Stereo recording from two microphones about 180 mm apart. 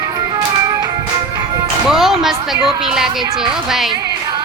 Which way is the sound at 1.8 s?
Centre (ahead or behind).